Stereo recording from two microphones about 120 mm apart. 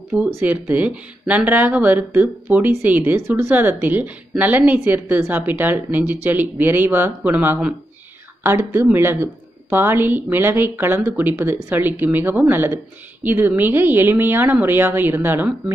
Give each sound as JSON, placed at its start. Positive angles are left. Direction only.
{"t": 0.4, "sound": "speech", "side_deg": -15}